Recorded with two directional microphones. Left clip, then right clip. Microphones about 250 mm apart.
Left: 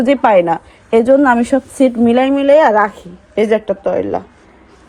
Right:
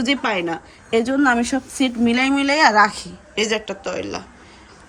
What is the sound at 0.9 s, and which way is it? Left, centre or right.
Speech, left.